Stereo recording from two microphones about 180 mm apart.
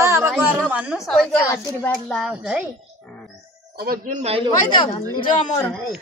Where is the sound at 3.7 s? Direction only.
55° right (ahead or behind); by 4.5 s 35° right (ahead or behind).